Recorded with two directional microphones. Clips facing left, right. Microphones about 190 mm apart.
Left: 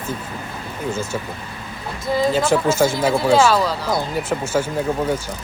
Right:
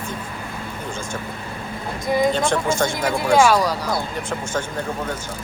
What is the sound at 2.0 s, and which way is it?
Speech, 20° right (ahead or behind).